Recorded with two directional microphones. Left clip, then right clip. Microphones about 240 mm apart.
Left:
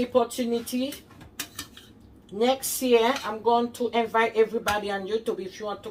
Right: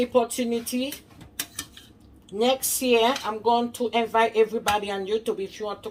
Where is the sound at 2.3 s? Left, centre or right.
Right.